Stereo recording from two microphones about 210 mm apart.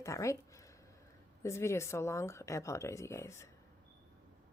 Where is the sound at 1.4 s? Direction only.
15° left (ahead or behind).